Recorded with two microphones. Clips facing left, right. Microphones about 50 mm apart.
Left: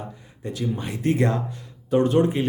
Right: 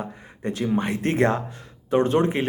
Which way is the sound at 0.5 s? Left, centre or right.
Right.